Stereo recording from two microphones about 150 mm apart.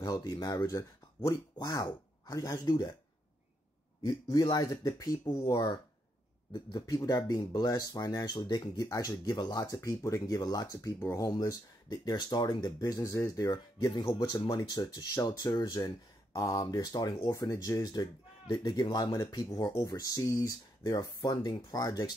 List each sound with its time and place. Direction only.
0.0 s speech: 25° left (ahead or behind)
4.0 s speech: 25° left (ahead or behind)